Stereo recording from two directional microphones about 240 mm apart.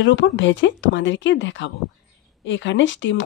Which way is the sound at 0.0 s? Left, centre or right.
Left.